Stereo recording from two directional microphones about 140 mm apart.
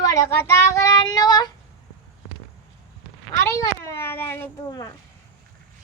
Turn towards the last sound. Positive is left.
turn(degrees=15)  # may be behind; listen again after turning